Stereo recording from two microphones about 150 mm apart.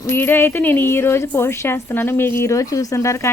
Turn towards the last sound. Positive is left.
turn(degrees=20)  # may be behind; listen again after turning